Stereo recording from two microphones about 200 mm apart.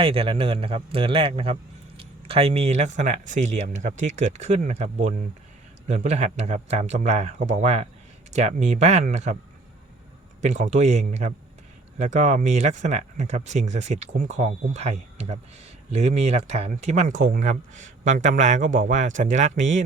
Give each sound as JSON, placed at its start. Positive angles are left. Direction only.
{"t": 0.0, "sound": "a man's voice", "side_deg": -30}
{"t": 10.4, "sound": "speech", "side_deg": -35}